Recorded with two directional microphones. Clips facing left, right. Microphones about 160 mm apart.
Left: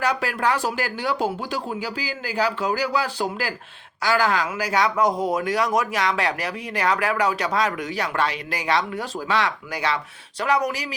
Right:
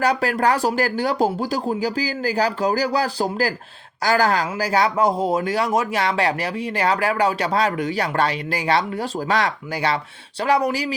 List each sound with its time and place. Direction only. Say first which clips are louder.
0.0 s speech: right 4 dB; 35° right (ahead or behind)